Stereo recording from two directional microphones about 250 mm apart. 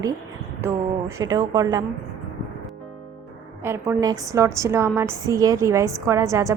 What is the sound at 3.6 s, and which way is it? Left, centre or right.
A woman's voice, centre.